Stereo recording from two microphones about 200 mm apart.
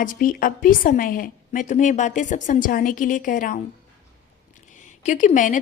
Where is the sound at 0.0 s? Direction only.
45° left (ahead or behind).